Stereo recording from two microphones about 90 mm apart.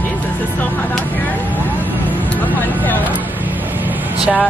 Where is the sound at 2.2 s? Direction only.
20° left (ahead or behind).